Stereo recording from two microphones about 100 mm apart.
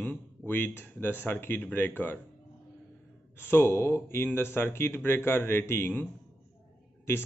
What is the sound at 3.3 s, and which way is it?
A man's voice, 20° left (ahead or behind).